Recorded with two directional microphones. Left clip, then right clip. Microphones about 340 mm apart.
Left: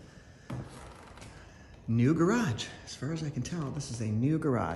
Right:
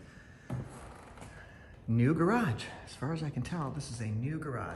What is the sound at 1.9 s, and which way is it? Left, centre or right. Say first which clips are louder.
Speech: left 2 dB; centre.